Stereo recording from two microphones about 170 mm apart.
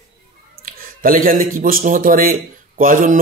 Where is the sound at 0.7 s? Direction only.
55° right (ahead or behind).